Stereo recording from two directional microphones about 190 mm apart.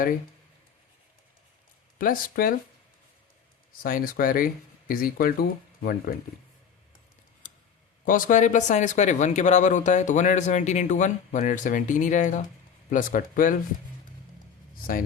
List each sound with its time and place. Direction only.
2.0 s speech: 50° left (ahead or behind)
3.8 s speech: 50° left (ahead or behind)
8.0 s speech: 45° left (ahead or behind)